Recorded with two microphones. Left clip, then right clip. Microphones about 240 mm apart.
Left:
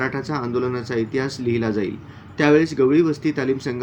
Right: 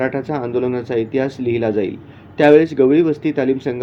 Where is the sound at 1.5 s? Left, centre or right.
Centre.